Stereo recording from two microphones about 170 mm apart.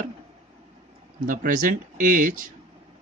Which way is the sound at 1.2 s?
55° right (ahead or behind).